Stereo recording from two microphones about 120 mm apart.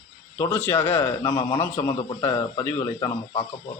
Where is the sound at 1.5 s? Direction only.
20° left (ahead or behind).